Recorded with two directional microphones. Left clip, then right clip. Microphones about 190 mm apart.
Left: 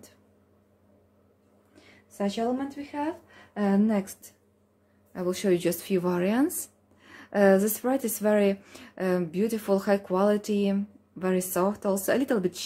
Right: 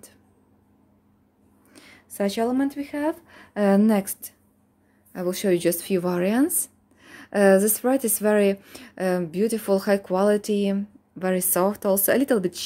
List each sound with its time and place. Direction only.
1.8 s a sound: 50° right (ahead or behind)
2.1 s a woman's voice: 65° right (ahead or behind)
5.1 s speech: 25° right (ahead or behind)